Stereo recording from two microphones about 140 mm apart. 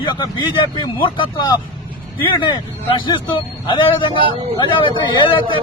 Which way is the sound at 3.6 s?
35° left (ahead or behind).